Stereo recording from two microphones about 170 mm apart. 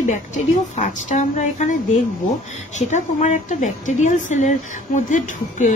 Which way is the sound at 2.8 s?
45° left (ahead or behind).